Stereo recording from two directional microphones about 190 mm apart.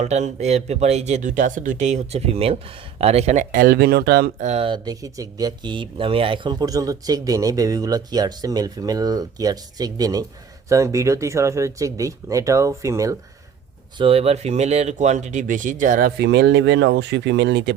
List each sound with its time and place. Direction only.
0.0 s speech: 35° right (ahead or behind); by 4.4 s 55° right (ahead or behind)
4.4 s speech: 30° right (ahead or behind)
14.0 s speech: 30° right (ahead or behind); by 17.7 s 65° right (ahead or behind)